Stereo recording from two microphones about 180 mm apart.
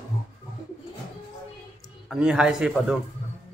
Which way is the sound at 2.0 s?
5° right (ahead or behind).